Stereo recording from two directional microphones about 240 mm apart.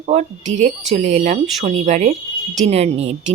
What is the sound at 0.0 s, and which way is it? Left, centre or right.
Speech, right.